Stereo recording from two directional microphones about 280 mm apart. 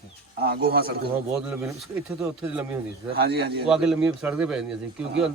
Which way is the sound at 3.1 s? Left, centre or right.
Right.